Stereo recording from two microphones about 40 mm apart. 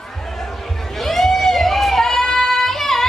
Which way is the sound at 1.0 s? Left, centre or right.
Centre.